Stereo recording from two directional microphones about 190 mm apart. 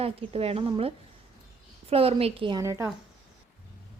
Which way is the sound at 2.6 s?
15° right (ahead or behind).